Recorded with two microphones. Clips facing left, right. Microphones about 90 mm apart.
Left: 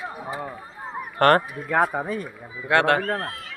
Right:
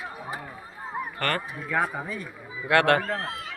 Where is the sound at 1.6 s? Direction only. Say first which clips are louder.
Left 3 dB; 45° left (ahead or behind).